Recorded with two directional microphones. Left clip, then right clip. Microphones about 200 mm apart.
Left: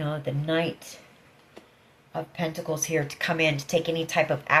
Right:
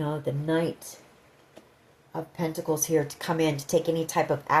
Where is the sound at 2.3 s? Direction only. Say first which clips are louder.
Right 2 dB; 55° right (ahead or behind).